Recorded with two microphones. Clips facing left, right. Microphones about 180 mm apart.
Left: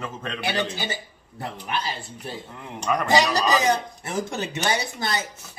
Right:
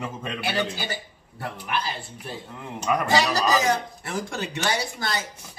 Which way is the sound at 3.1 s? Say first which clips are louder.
Left 2 dB; 15° left (ahead or behind).